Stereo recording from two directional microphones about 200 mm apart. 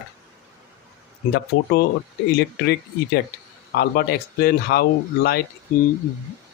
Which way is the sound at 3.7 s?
50° left (ahead or behind).